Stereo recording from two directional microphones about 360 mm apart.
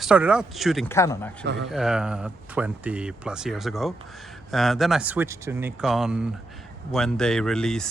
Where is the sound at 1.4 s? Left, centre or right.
Right.